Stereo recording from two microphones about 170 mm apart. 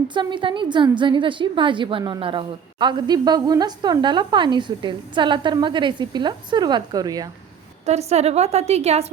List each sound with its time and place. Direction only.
0.1 s a woman's voice: 30° right (ahead or behind)
7.9 s a woman's voice: 40° right (ahead or behind)